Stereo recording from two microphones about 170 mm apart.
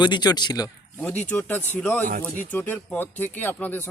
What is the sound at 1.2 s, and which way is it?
Speech, 10° left (ahead or behind).